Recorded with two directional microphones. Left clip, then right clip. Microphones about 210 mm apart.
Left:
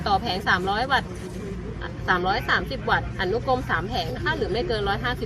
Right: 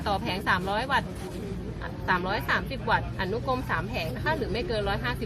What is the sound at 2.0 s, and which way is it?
Speech, 30° left (ahead or behind).